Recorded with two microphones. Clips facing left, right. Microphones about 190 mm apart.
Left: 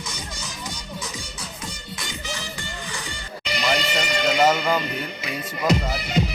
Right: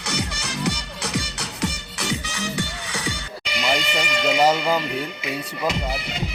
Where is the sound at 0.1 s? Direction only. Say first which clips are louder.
Right 7 dB; 75° right (ahead or behind).